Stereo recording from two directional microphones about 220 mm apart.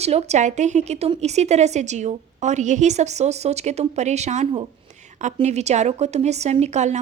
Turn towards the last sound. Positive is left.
turn(degrees=-30)  # may be behind; listen again after turning